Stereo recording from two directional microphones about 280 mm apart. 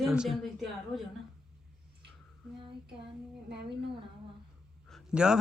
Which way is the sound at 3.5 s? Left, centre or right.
Right.